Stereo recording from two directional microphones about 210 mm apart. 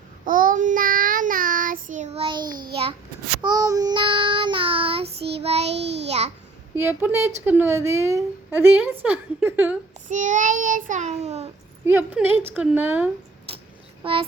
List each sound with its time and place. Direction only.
0.3 s child singing: 40° right (ahead or behind)
3.4 s child singing: 20° right (ahead or behind)
6.1 s a child's voice: 30° right (ahead or behind)
6.7 s speech: 10° right (ahead or behind)
10.1 s child singing: 35° right (ahead or behind)
11.9 s speech: 10° right (ahead or behind)
14.0 s speech: 25° right (ahead or behind)